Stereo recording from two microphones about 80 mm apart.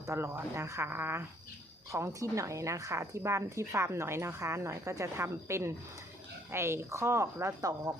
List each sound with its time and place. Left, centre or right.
0.0 s speech: right
1.9 s speech: right